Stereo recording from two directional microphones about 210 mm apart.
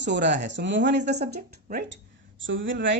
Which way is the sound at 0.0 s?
55° right (ahead or behind).